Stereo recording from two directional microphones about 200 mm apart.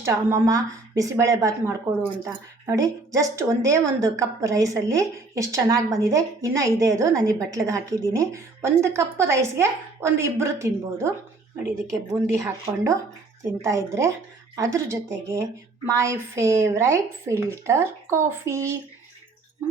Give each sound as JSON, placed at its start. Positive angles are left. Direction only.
{"t": 0.0, "sound": "a woman's voice", "side_deg": -15}